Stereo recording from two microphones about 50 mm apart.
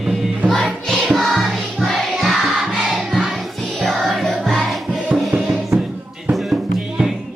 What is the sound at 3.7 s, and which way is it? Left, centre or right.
Music, centre.